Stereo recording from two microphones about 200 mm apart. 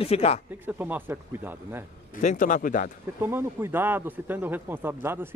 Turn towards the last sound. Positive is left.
turn(degrees=-10)  # may be behind; listen again after turning